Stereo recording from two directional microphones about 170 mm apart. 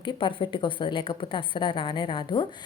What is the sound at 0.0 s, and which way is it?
A woman's voice, 30° left (ahead or behind).